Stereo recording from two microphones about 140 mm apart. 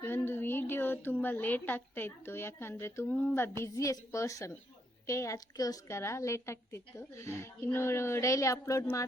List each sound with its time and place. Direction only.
0.0 s a woman's voice: 15° left (ahead or behind)